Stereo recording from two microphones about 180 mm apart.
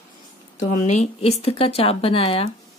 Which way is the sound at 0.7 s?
40° left (ahead or behind).